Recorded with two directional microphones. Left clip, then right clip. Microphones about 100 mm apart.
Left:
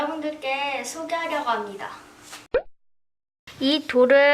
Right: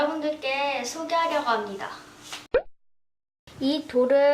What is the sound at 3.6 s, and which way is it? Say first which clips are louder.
Speech: left 5 dB; 40° left (ahead or behind).